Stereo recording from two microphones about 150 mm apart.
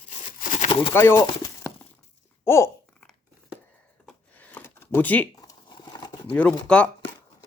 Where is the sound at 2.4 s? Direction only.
20° left (ahead or behind).